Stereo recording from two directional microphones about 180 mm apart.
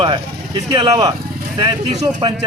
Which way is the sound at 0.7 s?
25° right (ahead or behind).